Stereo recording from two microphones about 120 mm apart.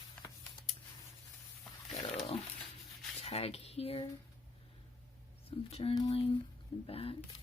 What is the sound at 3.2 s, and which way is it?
Cutlery, 60° left (ahead or behind).